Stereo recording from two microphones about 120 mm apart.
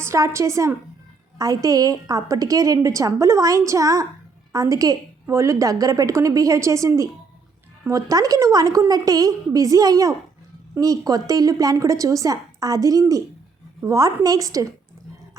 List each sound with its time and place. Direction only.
0.0 s a woman's voice: 25° right (ahead or behind)